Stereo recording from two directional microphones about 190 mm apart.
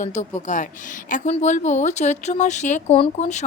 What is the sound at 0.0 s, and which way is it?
Speech, 40° left (ahead or behind).